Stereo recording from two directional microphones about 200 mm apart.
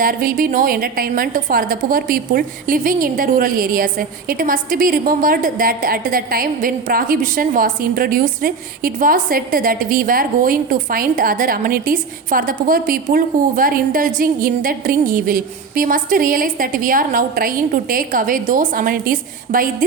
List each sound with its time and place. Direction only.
0.0 s a woman's voice: 45° right (ahead or behind)